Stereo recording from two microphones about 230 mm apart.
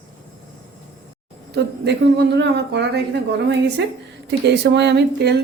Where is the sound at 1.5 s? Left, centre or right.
Right.